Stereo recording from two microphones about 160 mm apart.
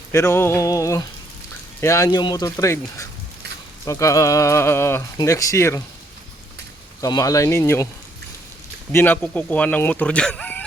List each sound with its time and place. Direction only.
0.1 s speech: 15° left (ahead or behind)
7.0 s speech: 20° left (ahead or behind)
8.9 s speech: 15° left (ahead or behind)